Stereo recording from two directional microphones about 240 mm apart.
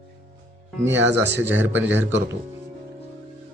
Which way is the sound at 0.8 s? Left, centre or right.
Right.